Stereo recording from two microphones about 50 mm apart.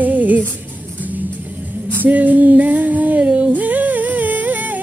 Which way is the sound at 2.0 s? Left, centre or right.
Right.